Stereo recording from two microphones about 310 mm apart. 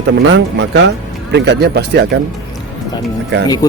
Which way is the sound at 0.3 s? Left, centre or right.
Right.